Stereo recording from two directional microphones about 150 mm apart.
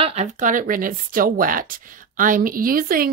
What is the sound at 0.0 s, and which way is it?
Speech, 45° right (ahead or behind).